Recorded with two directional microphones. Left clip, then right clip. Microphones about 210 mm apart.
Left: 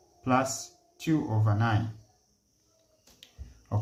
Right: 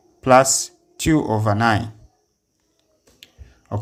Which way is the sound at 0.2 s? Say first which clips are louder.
Right 14 dB; 50° right (ahead or behind).